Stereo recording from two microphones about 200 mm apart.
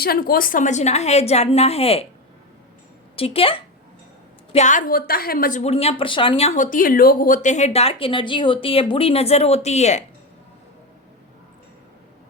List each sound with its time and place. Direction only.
0.0 s a woman's voice: 50° left (ahead or behind); by 2.0 s 30° left (ahead or behind)
3.2 s speech: 30° left (ahead or behind)
4.5 s a woman's voice: 40° left (ahead or behind)